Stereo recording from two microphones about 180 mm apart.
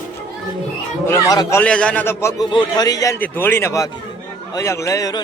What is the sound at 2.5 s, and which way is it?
A man's voice, 25° left (ahead or behind).